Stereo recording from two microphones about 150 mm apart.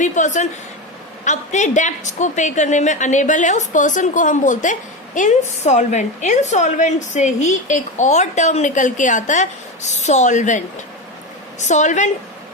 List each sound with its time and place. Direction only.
0.0 s a woman's voice: 55° left (ahead or behind)
11.6 s a woman's voice: 50° left (ahead or behind)